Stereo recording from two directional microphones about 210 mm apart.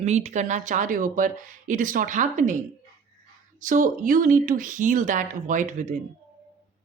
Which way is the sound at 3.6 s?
40° right (ahead or behind).